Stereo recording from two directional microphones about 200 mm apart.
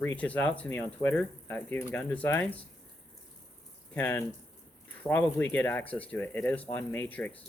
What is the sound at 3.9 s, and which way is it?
Speech, 5° left (ahead or behind).